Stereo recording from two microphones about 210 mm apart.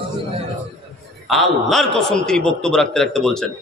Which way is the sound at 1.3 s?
Centre (ahead or behind).